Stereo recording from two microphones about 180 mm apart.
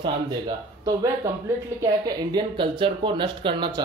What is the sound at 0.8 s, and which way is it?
Speech, 20° right (ahead or behind).